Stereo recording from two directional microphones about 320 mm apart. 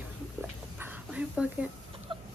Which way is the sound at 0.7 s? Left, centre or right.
Centre.